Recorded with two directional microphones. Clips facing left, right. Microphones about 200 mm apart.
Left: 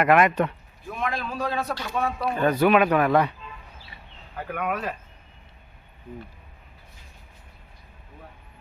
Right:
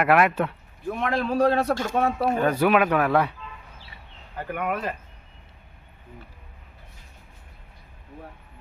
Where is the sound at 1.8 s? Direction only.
45° right (ahead or behind).